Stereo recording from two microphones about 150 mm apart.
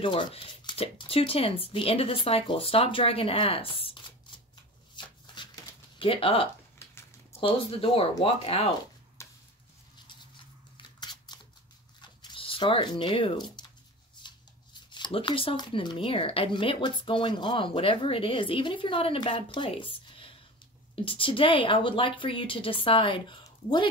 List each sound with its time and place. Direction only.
0.0 s speech: 35° left (ahead or behind)
4.9 s shuffling cards: 30° left (ahead or behind)
5.9 s speech: 35° left (ahead or behind)
6.8 s a sound: 15° left (ahead or behind)
7.3 s speech: 40° left (ahead or behind)
9.2 s a sound: 20° left (ahead or behind)
10.3 s scissors: 30° left (ahead or behind)
12.0 s zipper: 30° left (ahead or behind)
14.2 s speech: 30° left (ahead or behind)